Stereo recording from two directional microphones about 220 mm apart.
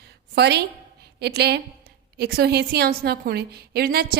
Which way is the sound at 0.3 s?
50° right (ahead or behind).